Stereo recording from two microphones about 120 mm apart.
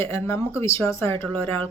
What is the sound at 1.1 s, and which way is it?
Speech, 50° right (ahead or behind).